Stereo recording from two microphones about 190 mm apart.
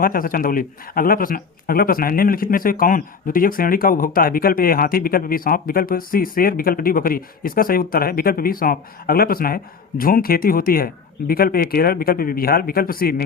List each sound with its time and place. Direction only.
0.0 s speech: 50° left (ahead or behind)